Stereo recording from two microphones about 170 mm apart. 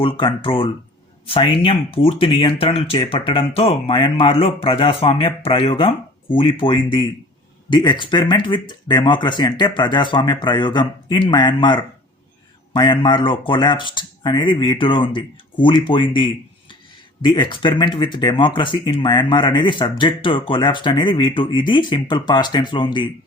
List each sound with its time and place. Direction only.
0.0 s speech: 30° left (ahead or behind)